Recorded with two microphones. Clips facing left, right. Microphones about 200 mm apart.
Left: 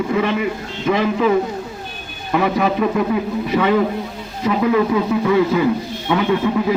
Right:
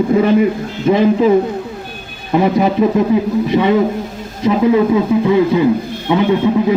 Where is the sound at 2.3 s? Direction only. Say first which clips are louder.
Right 4 dB; 30° right (ahead or behind).